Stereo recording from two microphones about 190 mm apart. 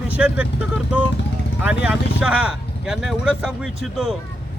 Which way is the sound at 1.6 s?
5° right (ahead or behind).